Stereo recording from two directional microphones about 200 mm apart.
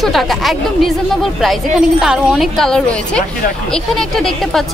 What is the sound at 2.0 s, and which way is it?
Speech, centre (ahead or behind).